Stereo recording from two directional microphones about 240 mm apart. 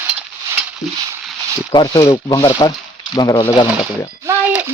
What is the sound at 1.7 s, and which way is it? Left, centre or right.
Speech, centre.